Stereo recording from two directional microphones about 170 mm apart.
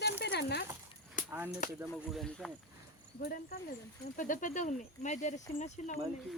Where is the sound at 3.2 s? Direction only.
60° left (ahead or behind).